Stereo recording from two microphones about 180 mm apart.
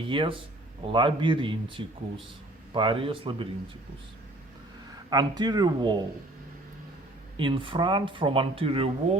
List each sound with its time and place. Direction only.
0.0 s speech: 30° right (ahead or behind)
5.0 s speech: 25° right (ahead or behind)
7.3 s speech: 30° right (ahead or behind)